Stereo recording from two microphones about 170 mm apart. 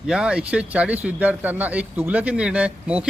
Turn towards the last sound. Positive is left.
turn(degrees=-5)  # may be behind; listen again after turning